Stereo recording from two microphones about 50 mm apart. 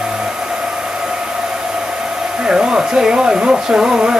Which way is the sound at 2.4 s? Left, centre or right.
Centre.